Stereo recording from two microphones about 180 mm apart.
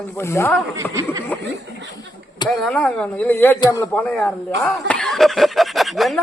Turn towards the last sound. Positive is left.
turn(degrees=0)  # may be behind; listen again after turning